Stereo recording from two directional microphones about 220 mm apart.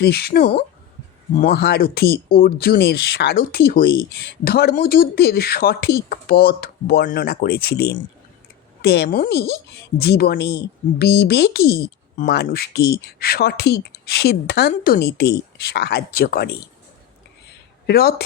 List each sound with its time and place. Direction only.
0.0 s speech: 45° left (ahead or behind)
17.8 s speech: 45° left (ahead or behind)